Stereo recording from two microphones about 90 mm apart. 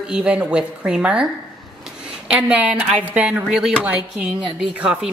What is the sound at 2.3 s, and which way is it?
A woman's voice, 15° right (ahead or behind).